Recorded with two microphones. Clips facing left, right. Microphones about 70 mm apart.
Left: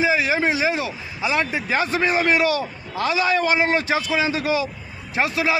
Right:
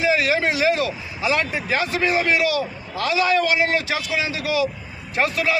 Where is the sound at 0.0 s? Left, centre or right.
Left.